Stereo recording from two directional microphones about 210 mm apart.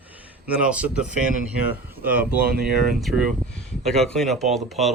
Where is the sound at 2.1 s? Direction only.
5° right (ahead or behind).